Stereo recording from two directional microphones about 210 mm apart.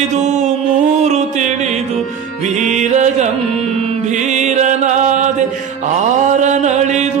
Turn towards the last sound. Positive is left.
turn(degrees=-35)  # may be behind; listen again after turning